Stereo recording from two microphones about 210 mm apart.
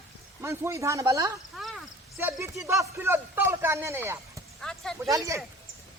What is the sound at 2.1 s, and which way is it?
Speech, 10° right (ahead or behind).